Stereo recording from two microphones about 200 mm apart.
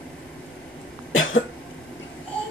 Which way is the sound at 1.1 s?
75° left (ahead or behind).